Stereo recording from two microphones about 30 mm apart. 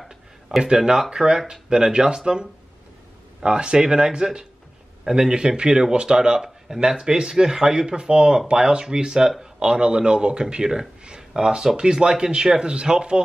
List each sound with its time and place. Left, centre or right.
0.6 s speech: right
6.4 s speech: centre
7.0 s a man's voice: right